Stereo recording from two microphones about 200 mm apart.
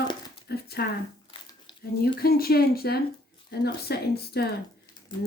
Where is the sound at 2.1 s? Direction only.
50° left (ahead or behind).